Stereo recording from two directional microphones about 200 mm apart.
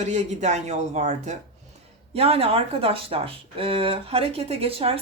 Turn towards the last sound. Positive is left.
turn(degrees=-30)  # may be behind; listen again after turning